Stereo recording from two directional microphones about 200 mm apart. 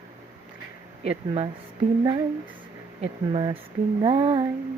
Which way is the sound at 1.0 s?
30° right (ahead or behind).